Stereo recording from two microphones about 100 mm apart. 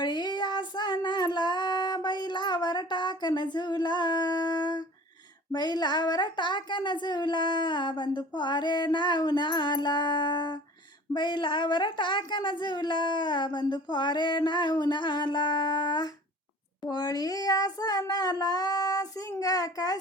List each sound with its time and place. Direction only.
0.0 s female singing: 45° left (ahead or behind)
5.5 s a sound: 45° left (ahead or behind)
16.8 s child singing: 40° left (ahead or behind)